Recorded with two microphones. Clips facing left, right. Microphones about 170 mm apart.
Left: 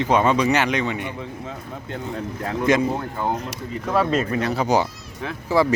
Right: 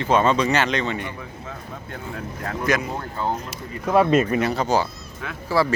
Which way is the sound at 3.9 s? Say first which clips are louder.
Right 4 dB; 15° right (ahead or behind).